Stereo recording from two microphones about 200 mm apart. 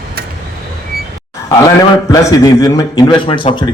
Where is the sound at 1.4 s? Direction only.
15° left (ahead or behind).